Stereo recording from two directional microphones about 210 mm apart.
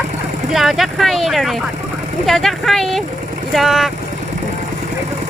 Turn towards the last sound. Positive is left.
turn(degrees=0)  # may be behind; listen again after turning